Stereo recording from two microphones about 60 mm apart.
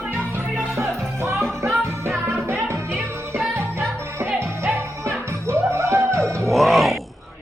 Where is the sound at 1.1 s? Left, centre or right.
Right.